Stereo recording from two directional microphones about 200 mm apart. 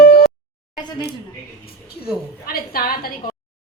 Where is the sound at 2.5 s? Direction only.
50° left (ahead or behind).